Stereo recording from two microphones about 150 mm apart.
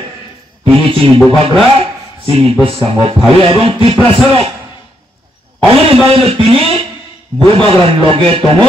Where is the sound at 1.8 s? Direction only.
40° right (ahead or behind).